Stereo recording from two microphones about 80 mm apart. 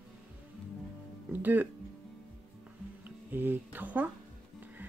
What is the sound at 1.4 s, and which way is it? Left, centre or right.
Speech, right.